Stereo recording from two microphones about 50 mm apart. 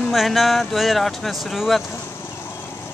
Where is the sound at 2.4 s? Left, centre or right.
Left.